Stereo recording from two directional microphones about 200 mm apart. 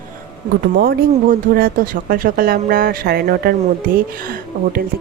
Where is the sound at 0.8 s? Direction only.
50° right (ahead or behind).